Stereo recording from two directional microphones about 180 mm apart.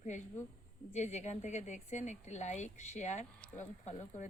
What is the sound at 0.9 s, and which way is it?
Speech, 40° left (ahead or behind).